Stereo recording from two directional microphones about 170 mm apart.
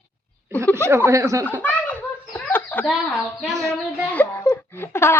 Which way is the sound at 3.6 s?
5° left (ahead or behind).